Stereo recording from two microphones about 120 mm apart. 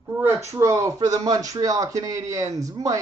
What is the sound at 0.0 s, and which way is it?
Speech, 20° right (ahead or behind).